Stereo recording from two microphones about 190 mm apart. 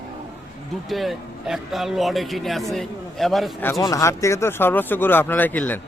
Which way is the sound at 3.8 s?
15° left (ahead or behind).